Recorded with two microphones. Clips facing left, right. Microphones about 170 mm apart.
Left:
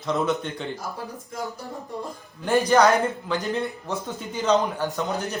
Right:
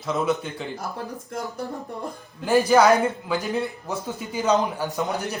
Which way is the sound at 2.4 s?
5° right (ahead or behind).